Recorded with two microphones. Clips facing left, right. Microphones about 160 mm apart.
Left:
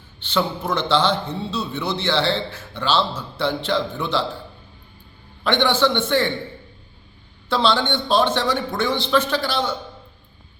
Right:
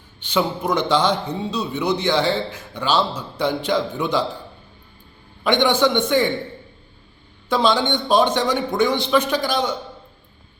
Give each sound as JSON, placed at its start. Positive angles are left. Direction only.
{"t": 0.3, "sound": "a man's voice", "side_deg": -15}
{"t": 5.4, "sound": "a man's voice", "side_deg": -15}
{"t": 7.5, "sound": "a man's voice", "side_deg": -15}